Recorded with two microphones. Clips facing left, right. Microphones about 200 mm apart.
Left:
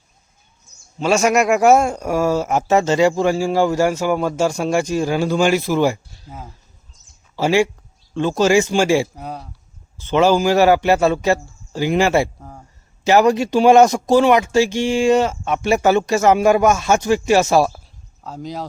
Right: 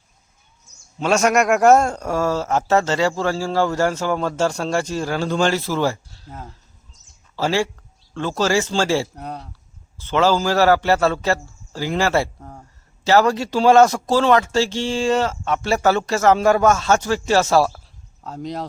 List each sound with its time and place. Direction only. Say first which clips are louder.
0.9 s speech: left 1 dB; centre (ahead or behind)
9.1 s speech: left 1 dB; 5° left (ahead or behind)
10.0 s speech: left 3 dB; 15° left (ahead or behind)
12.4 s speech: even; centre (ahead or behind)
13.1 s speech: left 3 dB; 15° left (ahead or behind)
18.2 s speech: even; centre (ahead or behind)